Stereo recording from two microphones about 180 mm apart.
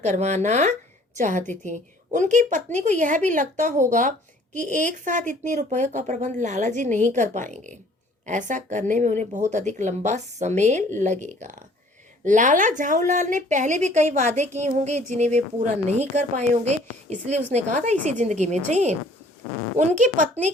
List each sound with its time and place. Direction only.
0.0 s a woman's voice: 40° right (ahead or behind)